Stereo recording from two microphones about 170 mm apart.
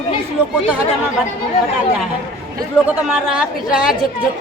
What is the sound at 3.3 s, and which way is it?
Speech, 5° right (ahead or behind).